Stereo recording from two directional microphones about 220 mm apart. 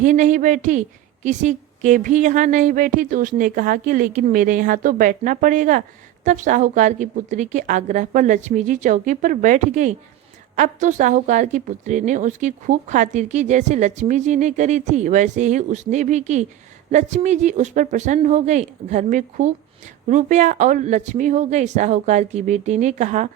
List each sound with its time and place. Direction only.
0.0 s speech: 35° right (ahead or behind)